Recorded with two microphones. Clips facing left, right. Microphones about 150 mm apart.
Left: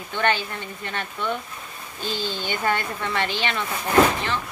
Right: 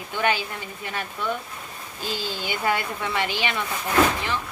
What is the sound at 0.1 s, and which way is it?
Speech, 10° right (ahead or behind).